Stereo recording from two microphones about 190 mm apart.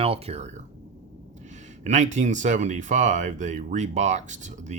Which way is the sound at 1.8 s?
40° right (ahead or behind).